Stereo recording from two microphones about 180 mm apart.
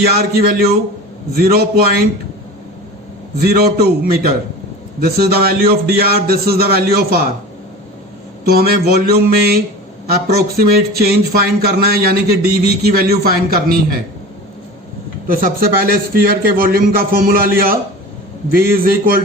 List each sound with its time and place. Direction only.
0.3 s speech: 55° right (ahead or behind)
3.4 s speech: 60° right (ahead or behind)
8.4 s speech: 60° right (ahead or behind)
15.3 s speech: 55° right (ahead or behind)